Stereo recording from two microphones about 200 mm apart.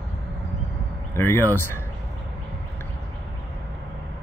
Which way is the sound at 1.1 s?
10° left (ahead or behind).